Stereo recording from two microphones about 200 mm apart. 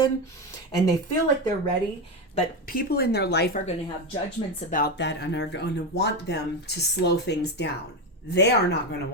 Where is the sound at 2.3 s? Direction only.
45° left (ahead or behind).